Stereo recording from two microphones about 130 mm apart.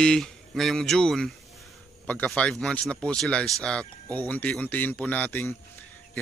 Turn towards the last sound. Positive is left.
turn(degrees=15)  # may be behind; listen again after turning